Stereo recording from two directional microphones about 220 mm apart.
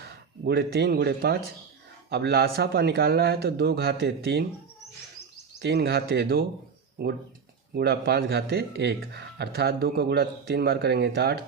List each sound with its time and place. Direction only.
0.4 s speech: 50° right (ahead or behind)
5.5 s speech: 50° right (ahead or behind)
7.7 s speech: 45° right (ahead or behind)